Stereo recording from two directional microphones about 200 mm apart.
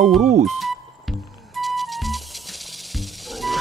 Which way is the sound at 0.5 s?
Centre (ahead or behind).